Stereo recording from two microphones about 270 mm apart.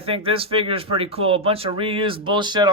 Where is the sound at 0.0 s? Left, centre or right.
Centre.